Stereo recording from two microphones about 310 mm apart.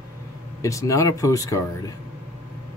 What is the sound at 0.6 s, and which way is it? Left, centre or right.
Speech, centre.